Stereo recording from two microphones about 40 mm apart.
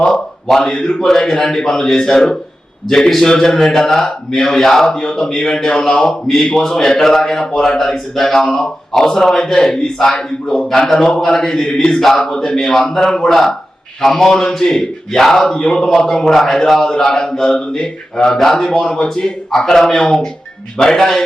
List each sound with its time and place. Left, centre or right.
0.8 s mantra: left
1.3 s speech: centre
17.5 s mantra: left
18.3 s a man's voice: centre
18.5 s speech: centre